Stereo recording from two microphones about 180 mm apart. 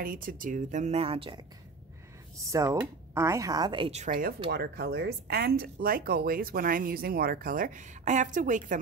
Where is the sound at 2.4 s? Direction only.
15° right (ahead or behind); by 4.1 s 35° right (ahead or behind).